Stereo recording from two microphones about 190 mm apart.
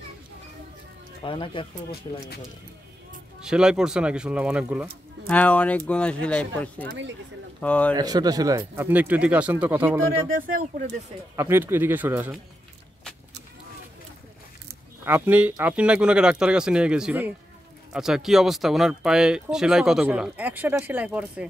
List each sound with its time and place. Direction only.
1.2 s speech: 25° left (ahead or behind)
3.3 s speech: 5° right (ahead or behind)
5.3 s speech: 5° left (ahead or behind)
7.9 s speech: 20° right (ahead or behind)
10.3 s speech: 45° right (ahead or behind)
11.3 s speech: 10° right (ahead or behind)
15.0 s speech: 10° right (ahead or behind)